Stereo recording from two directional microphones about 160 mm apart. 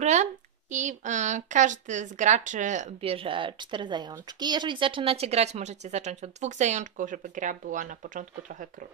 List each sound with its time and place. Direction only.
0.0 s speech: 45° right (ahead or behind)